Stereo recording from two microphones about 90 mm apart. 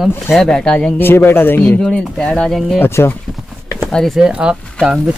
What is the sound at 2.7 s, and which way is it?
Speech, 25° left (ahead or behind).